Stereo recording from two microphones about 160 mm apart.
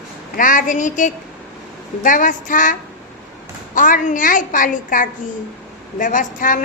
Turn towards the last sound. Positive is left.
turn(degrees=55)  # may be behind; listen again after turning